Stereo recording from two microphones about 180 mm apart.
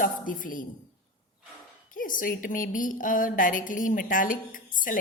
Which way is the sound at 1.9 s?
50° left (ahead or behind).